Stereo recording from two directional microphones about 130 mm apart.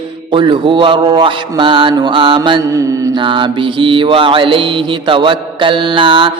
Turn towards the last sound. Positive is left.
turn(degrees=-40)  # may be behind; listen again after turning